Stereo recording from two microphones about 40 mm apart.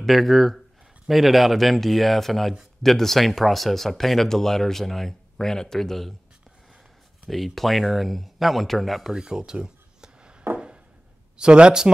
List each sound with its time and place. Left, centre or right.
0.0 s speech: centre
7.2 s speech: centre
9.1 s speech: centre
9.4 s a sound: right
11.3 s speech: right